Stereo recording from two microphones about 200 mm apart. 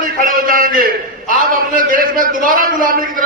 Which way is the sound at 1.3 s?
40° right (ahead or behind).